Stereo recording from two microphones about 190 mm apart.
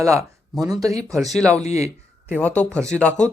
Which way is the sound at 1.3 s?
5° left (ahead or behind).